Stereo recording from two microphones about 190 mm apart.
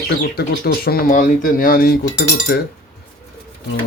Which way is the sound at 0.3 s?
55° left (ahead or behind).